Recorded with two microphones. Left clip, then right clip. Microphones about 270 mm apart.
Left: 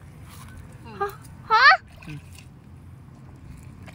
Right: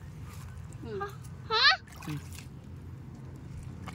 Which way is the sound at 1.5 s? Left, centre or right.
Centre.